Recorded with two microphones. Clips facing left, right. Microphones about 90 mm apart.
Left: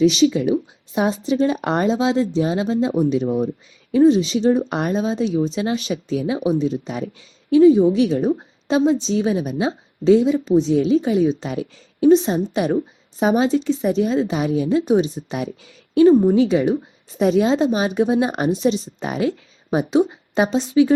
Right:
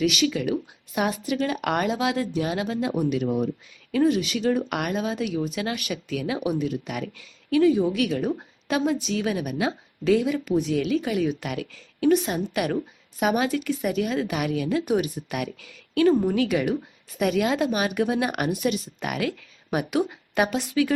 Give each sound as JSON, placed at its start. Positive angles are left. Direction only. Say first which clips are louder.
{"t": 0.0, "sound": "a woman's voice", "louder": "left 8 dB", "side_deg": 30}